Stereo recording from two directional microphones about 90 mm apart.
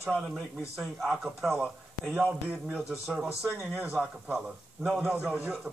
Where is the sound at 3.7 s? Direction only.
15° right (ahead or behind).